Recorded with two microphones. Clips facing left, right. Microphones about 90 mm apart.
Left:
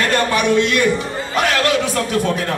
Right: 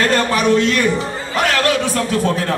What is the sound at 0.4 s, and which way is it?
A man's voice, 35° right (ahead or behind).